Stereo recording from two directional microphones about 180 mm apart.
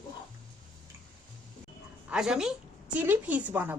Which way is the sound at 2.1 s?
5° right (ahead or behind).